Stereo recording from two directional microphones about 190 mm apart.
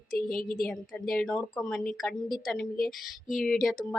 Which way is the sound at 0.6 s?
Centre (ahead or behind).